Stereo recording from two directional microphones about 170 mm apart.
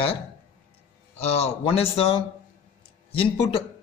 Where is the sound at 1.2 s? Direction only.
40° left (ahead or behind).